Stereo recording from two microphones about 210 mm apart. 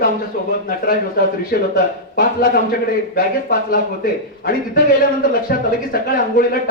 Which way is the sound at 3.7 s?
45° left (ahead or behind).